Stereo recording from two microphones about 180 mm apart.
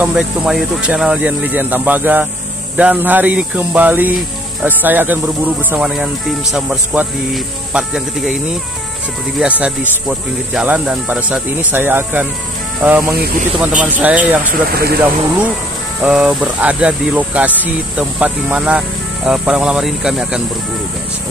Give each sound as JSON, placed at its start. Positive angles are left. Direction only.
{"t": 0.0, "sound": "speech", "side_deg": -5}
{"t": 9.6, "sound": "speech", "side_deg": -5}
{"t": 14.4, "sound": "speech", "side_deg": -55}
{"t": 16.0, "sound": "speech", "side_deg": -5}